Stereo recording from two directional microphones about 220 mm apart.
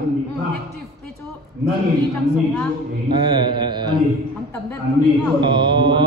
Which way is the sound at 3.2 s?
20° right (ahead or behind).